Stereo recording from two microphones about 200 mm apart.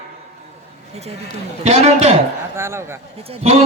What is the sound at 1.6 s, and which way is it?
Speech, 35° right (ahead or behind).